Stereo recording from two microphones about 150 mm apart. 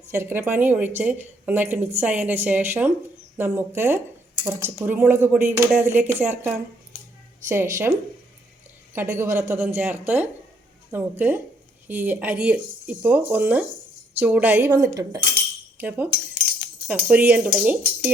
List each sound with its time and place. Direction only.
0.1 s a woman's voice: 15° right (ahead or behind)
9.0 s a woman's voice: 15° right (ahead or behind)
14.7 s cutlery: 25° right (ahead or behind)
15.8 s a woman's voice: 10° right (ahead or behind)